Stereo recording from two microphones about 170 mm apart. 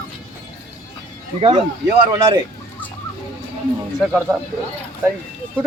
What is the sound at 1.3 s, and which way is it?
Speech, 35° right (ahead or behind).